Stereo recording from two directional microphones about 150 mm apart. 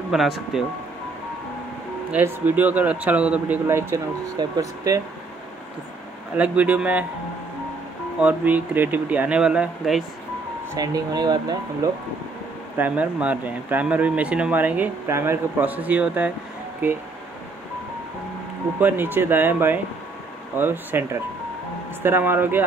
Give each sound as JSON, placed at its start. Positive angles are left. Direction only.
{"t": 0.1, "sound": "speech", "side_deg": 0}
{"t": 2.0, "sound": "speech", "side_deg": -10}
{"t": 6.3, "sound": "speech", "side_deg": -10}
{"t": 8.2, "sound": "speech", "side_deg": -10}
{"t": 10.7, "sound": "speech", "side_deg": -25}
{"t": 12.7, "sound": "speech", "side_deg": -10}
{"t": 18.8, "sound": "speech", "side_deg": -10}